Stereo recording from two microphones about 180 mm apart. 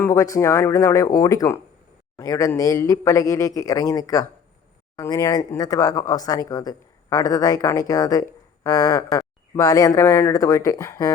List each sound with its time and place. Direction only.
0.0 s speech: 15° left (ahead or behind)